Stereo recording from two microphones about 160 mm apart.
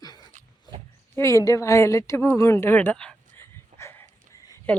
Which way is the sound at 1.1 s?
20° left (ahead or behind).